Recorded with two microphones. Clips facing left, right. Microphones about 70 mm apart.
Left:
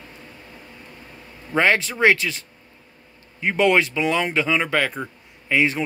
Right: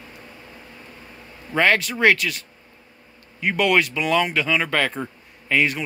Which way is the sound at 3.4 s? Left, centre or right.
Left.